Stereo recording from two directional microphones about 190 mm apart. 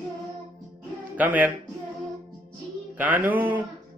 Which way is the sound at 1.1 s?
10° right (ahead or behind).